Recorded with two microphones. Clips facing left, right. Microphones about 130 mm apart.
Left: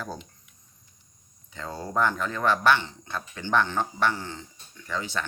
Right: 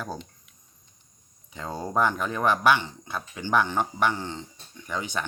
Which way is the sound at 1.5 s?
15° right (ahead or behind).